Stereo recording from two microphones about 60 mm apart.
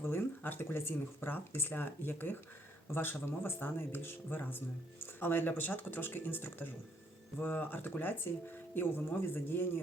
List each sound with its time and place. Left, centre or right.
0.0 s speech: left